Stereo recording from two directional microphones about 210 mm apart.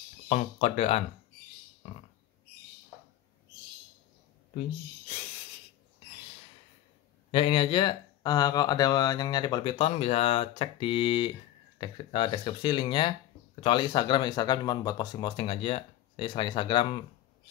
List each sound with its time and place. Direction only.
0.3 s speech: 30° left (ahead or behind)
7.2 s speech: 25° left (ahead or behind)